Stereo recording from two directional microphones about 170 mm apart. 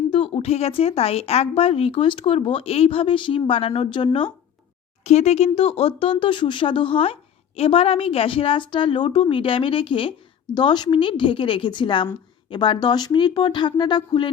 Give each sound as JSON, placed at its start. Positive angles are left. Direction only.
{"t": 0.1, "sound": "a woman's voice", "side_deg": 35}